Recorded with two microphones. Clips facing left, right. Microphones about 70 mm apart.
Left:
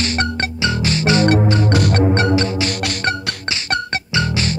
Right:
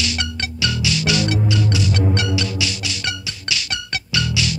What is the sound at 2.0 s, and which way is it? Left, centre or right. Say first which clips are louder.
Music: left 6 dB; left.